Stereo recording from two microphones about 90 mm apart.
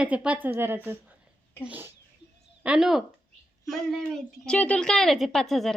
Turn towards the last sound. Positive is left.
turn(degrees=0)  # may be behind; listen again after turning